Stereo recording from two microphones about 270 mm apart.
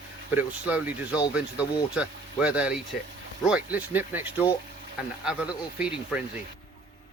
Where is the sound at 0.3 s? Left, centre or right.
Centre.